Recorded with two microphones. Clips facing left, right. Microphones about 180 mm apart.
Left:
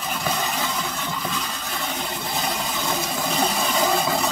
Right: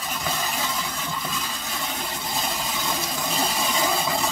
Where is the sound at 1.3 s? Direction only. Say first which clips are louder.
Left 2 dB; centre (ahead or behind).